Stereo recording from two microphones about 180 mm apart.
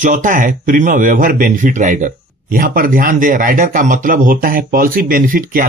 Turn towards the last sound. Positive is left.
turn(degrees=-50)  # may be behind; listen again after turning